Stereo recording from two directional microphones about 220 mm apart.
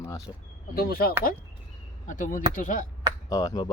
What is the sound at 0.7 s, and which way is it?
Speech, 45° left (ahead or behind).